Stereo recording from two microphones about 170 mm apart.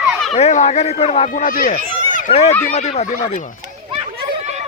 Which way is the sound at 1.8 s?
55° right (ahead or behind).